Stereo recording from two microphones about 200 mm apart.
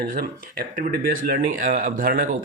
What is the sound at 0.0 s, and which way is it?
A man's voice, 50° right (ahead or behind).